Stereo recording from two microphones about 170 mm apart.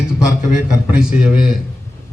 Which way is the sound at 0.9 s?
5° right (ahead or behind).